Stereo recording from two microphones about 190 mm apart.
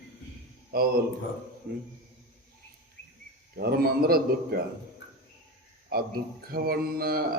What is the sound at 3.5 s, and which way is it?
A man's voice, 55° right (ahead or behind).